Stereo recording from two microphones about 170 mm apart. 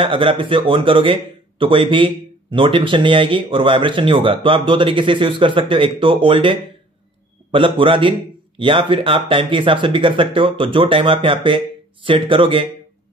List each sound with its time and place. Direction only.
0.0 s speech: 30° right (ahead or behind)